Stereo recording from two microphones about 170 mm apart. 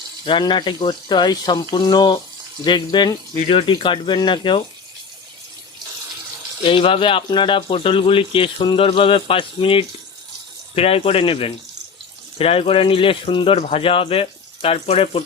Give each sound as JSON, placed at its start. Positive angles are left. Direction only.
{"t": 0.3, "sound": "speech", "side_deg": 30}
{"t": 6.6, "sound": "speech", "side_deg": 30}